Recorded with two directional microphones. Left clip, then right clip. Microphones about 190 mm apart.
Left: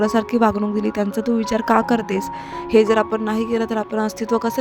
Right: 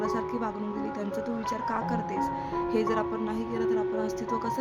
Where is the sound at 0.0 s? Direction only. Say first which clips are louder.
Left 12 dB; 40° left (ahead or behind).